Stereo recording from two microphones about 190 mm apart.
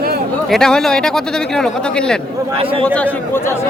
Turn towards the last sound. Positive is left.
turn(degrees=5)  # may be behind; listen again after turning